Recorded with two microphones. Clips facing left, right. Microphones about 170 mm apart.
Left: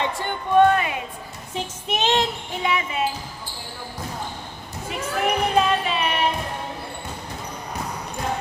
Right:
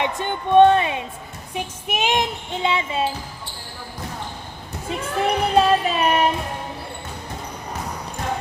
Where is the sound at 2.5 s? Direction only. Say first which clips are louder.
Right 2 dB; 25° right (ahead or behind).